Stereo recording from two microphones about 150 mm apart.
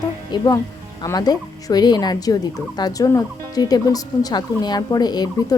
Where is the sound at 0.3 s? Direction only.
30° left (ahead or behind).